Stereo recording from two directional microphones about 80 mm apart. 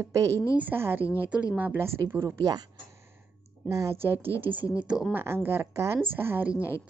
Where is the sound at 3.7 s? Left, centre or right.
Right.